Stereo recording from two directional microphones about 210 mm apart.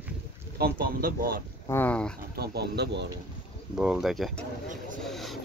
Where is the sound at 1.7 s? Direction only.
10° left (ahead or behind).